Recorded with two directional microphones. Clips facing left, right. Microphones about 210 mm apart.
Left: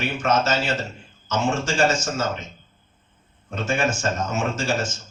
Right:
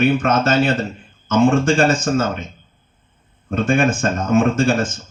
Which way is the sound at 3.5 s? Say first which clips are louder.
Right 7 dB; 55° right (ahead or behind).